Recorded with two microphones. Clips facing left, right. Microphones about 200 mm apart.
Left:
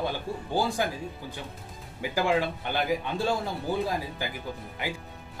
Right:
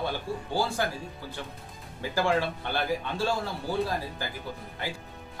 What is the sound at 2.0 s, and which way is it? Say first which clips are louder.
Speech: left 1 dB; 15° left (ahead or behind).